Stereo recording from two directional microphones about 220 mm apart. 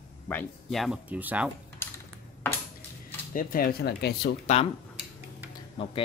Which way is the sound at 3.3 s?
40° left (ahead or behind).